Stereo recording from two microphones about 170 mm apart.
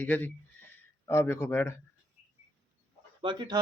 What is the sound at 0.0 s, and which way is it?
Speech, 10° left (ahead or behind).